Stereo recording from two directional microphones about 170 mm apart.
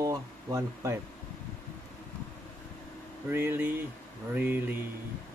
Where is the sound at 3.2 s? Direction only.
10° right (ahead or behind).